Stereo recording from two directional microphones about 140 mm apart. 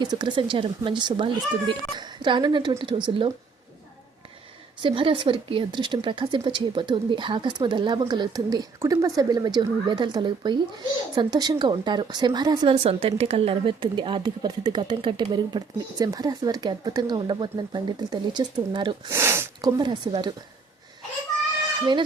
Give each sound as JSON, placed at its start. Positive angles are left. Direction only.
{"t": 0.0, "sound": "speech", "side_deg": -30}
{"t": 4.8, "sound": "speech", "side_deg": -40}
{"t": 12.7, "sound": "speech", "side_deg": -40}
{"t": 19.0, "sound": "speech", "side_deg": -20}